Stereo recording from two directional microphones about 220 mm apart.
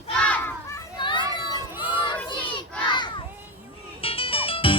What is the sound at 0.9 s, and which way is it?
Children playing, 20° left (ahead or behind).